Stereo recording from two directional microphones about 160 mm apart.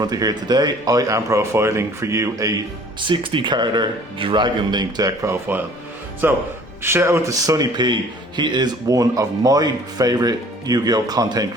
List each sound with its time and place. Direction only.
0.0 s speech: 25° right (ahead or behind)
3.0 s speech: 30° right (ahead or behind)